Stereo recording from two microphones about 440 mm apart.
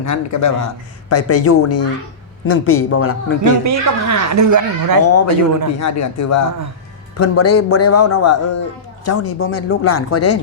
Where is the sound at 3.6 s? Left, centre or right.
Right.